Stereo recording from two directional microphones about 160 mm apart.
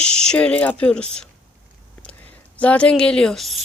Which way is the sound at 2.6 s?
10° left (ahead or behind).